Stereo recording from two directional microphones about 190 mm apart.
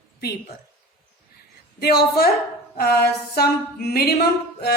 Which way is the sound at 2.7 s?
55° left (ahead or behind).